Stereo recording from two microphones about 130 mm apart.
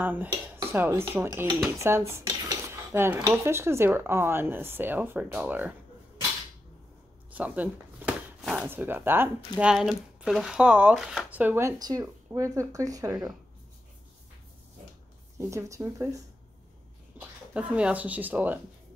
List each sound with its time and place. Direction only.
0.0 s speech: 15° right (ahead or behind)
7.3 s a sound: 10° right (ahead or behind)
8.4 s speech: 5° right (ahead or behind)
8.6 s speech: 15° right (ahead or behind)
9.6 s speech: 5° right (ahead or behind); by 13.3 s 30° right (ahead or behind)
15.3 s speech: 25° right (ahead or behind)
17.2 s speech: 10° right (ahead or behind)